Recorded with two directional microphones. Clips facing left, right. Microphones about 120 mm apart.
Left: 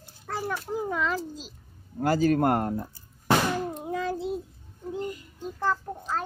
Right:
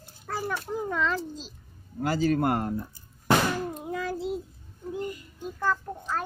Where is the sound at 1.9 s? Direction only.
45° left (ahead or behind).